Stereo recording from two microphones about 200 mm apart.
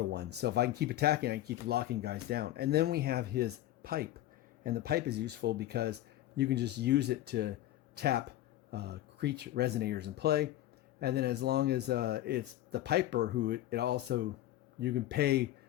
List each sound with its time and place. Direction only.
0.1 s speech: 55° right (ahead or behind)